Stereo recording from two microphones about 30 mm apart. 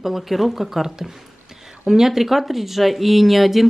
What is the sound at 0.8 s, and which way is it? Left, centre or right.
Speech, centre.